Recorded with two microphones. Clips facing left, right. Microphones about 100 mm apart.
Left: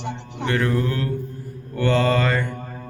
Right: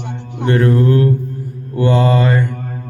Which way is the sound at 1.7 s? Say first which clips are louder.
Right 5 dB; 20° right (ahead or behind).